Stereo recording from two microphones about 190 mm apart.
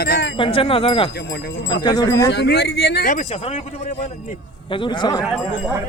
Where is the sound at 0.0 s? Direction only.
60° left (ahead or behind).